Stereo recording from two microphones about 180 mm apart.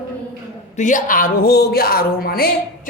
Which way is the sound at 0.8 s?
45° left (ahead or behind).